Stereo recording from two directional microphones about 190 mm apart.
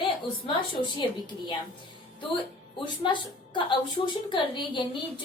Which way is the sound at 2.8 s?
25° left (ahead or behind).